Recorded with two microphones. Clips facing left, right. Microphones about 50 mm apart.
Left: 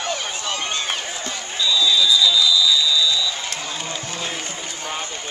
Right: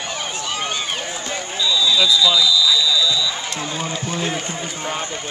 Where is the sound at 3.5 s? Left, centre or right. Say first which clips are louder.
Right 4 dB; centre.